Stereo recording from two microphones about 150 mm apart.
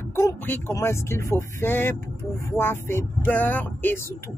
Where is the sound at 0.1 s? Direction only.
20° left (ahead or behind).